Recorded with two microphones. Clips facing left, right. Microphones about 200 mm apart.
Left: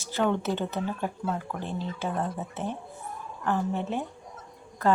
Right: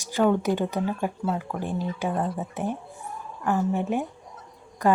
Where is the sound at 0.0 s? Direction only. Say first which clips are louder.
Right 4 dB; 10° right (ahead or behind).